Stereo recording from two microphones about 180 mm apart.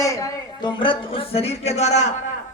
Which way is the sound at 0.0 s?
20° left (ahead or behind).